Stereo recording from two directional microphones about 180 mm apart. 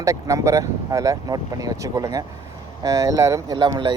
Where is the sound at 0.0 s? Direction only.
20° right (ahead or behind).